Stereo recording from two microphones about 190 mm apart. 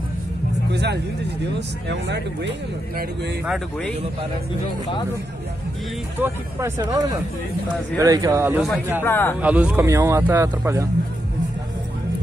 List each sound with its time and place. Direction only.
0.7 s speech: 65° right (ahead or behind)
3.4 s speech: centre (ahead or behind)
6.1 s speech: 10° right (ahead or behind)
8.5 s speech: centre (ahead or behind)
9.0 s a man's voice: 10° left (ahead or behind)
9.4 s speech: 5° right (ahead or behind)